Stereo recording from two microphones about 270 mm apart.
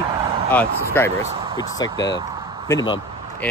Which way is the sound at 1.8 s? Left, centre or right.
Centre.